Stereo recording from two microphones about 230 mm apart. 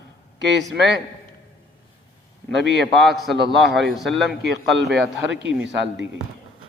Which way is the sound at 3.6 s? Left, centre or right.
Centre.